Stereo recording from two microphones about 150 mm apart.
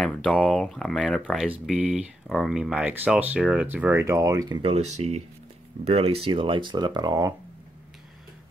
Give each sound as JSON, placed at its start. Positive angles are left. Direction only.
{"t": 0.0, "sound": "speech", "side_deg": 5}
{"t": 1.7, "sound": "speech", "side_deg": -10}
{"t": 4.6, "sound": "speech", "side_deg": -40}